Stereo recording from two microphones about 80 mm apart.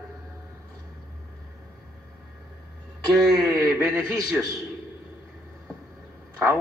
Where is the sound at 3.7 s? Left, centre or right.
Right.